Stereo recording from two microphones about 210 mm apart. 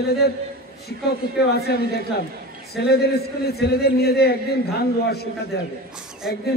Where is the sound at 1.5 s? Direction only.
50° left (ahead or behind).